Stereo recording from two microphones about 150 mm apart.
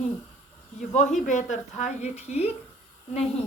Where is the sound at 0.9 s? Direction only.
55° left (ahead or behind).